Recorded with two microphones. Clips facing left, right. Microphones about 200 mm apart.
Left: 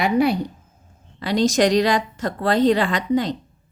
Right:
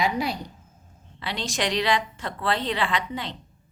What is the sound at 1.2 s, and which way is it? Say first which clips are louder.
A woman's voice: left 11 dB; 40° left (ahead or behind).